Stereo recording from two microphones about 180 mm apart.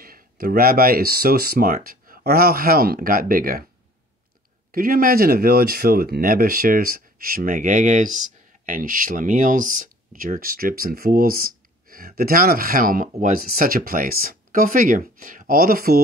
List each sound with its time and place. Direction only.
0.0 s speech: 55° right (ahead or behind)
4.7 s speech: 55° right (ahead or behind)